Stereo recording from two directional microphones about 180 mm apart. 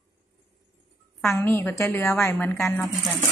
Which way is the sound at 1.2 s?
15° left (ahead or behind).